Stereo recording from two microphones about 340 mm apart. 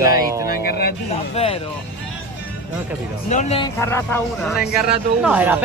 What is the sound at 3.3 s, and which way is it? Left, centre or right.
Speech, centre.